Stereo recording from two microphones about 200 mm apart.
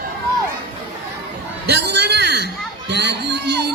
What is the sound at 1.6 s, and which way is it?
A man's voice, 55° right (ahead or behind).